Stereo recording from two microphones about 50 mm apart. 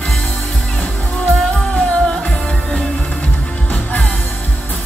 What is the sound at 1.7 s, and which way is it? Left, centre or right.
Music, left.